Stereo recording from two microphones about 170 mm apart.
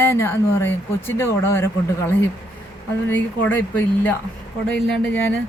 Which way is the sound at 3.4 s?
10° left (ahead or behind).